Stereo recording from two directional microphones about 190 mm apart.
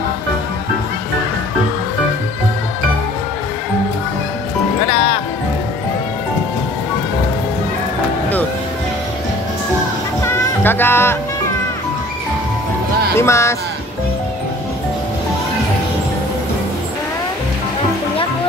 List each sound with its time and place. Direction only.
4.8 s music: 30° left (ahead or behind)
10.2 s music: 10° left (ahead or behind)
13.2 s speech: 15° left (ahead or behind)